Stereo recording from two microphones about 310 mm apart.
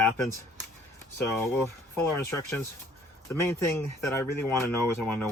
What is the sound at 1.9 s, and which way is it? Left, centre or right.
Speech, centre.